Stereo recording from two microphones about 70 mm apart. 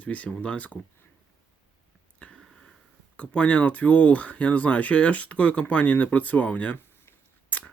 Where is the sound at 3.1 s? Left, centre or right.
Centre.